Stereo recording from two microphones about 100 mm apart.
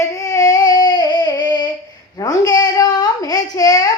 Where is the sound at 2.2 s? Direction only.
40° left (ahead or behind).